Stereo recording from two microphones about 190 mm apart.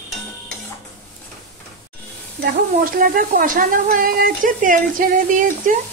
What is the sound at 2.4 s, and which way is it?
Speech, 50° right (ahead or behind).